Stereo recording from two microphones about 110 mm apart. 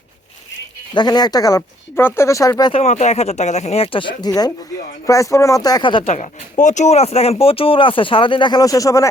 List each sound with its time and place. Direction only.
0.9 s speech: 40° left (ahead or behind)
2.0 s speech: 25° left (ahead or behind)
2.7 s speech: 80° left; by 4.3 s 50° left (ahead or behind)
4.3 s speech: 35° left (ahead or behind)
6.1 s speech: 90° left; by 9.0 s 30° left (ahead or behind)